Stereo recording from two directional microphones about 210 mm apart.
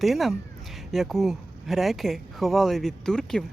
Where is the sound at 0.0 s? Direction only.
Centre (ahead or behind).